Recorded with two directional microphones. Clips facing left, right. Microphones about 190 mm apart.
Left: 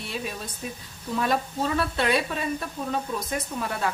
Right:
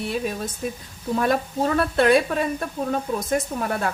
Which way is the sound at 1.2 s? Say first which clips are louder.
Right 4 dB; 50° right (ahead or behind).